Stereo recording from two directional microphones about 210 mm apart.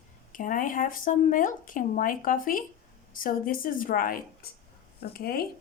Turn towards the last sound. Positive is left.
turn(degrees=45)  # may be behind; listen again after turning